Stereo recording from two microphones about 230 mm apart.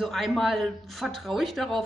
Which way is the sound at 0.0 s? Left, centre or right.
Centre.